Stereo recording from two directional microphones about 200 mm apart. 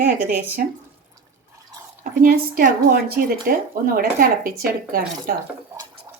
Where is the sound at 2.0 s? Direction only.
45° right (ahead or behind).